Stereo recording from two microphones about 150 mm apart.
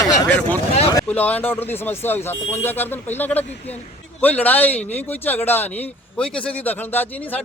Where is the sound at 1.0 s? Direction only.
10° left (ahead or behind).